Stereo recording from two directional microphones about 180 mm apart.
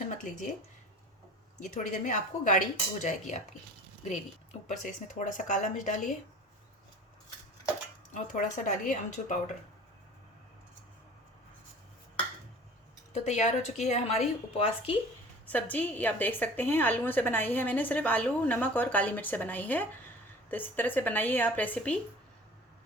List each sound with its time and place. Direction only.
1.5 s speech: 45° left (ahead or behind)
4.6 s speech: 45° left (ahead or behind)
8.1 s speech: 45° left (ahead or behind)
13.1 s a woman's voice: 40° left (ahead or behind)
15.4 s a woman's voice: 10° left (ahead or behind)